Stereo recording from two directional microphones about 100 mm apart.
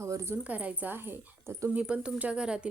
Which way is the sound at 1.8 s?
10° right (ahead or behind).